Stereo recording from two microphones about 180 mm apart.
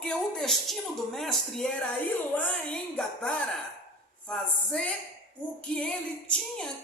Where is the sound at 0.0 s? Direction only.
Centre (ahead or behind).